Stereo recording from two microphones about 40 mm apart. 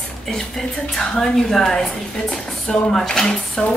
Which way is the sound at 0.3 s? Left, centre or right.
Centre.